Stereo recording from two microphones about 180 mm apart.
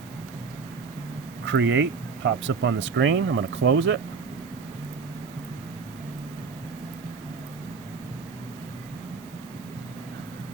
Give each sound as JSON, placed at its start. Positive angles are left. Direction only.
{"t": 1.5, "sound": "speech", "side_deg": -90}